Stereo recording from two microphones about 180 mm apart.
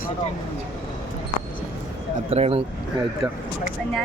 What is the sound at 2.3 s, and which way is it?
Speech, 35° right (ahead or behind).